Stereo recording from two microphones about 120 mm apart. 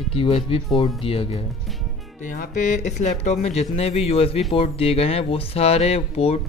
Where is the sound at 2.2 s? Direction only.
90° left.